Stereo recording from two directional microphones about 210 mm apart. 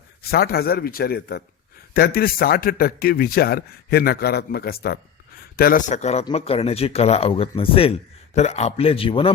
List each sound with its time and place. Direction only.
0.2 s a man's voice: 45° left (ahead or behind); by 9.3 s 25° left (ahead or behind)